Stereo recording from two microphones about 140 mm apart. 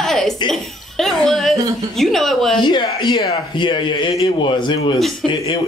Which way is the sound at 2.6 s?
35° left (ahead or behind).